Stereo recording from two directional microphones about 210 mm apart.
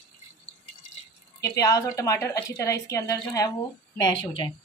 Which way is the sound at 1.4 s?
15° left (ahead or behind).